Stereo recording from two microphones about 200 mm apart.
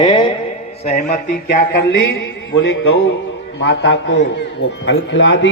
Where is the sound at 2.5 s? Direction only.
70° left (ahead or behind).